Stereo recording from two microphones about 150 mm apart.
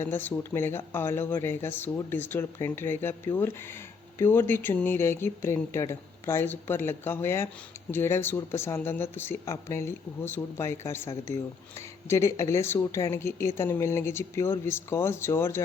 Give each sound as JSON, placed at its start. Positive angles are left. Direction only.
{"t": 0.0, "sound": "speech", "side_deg": 15}